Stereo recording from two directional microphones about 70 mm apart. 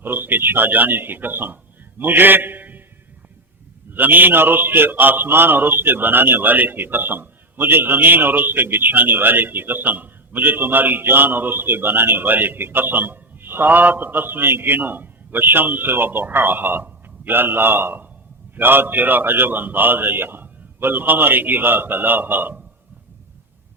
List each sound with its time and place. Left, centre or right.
0.0 s a man's voice: right
3.9 s a man's voice: right